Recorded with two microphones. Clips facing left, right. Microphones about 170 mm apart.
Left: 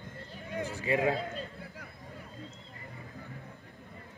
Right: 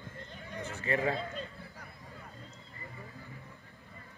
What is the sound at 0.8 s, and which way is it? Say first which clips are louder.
Speech: left 3 dB; 10° left (ahead or behind).